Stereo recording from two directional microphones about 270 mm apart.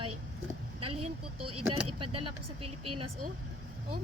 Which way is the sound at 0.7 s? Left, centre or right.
Right.